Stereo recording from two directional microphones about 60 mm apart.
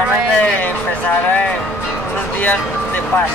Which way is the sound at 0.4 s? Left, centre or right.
Left.